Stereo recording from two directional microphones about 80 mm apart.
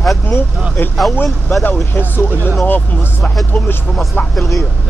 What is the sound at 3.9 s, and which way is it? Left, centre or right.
Speech, centre.